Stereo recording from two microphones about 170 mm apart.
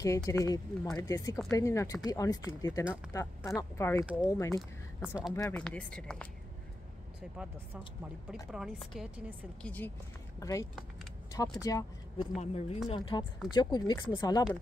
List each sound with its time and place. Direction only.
0.0 s speech: 20° left (ahead or behind)
4.0 s speech: 5° right (ahead or behind)
4.3 s speech: 20° left (ahead or behind)
4.6 s a woman's voice: 5° right (ahead or behind)
5.5 s speech: 5° left (ahead or behind)
8.3 s a woman's voice: 5° right (ahead or behind)
10.4 s speech: 20° left (ahead or behind)
12.4 s speech: 35° left (ahead or behind)